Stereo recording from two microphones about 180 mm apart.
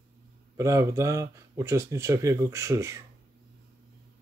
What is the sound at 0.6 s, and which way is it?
Speech, 15° right (ahead or behind).